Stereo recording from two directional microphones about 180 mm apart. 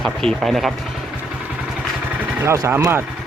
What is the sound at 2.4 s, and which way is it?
Speech, 15° right (ahead or behind).